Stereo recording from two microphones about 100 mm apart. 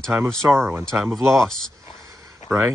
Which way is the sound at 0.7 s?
25° right (ahead or behind).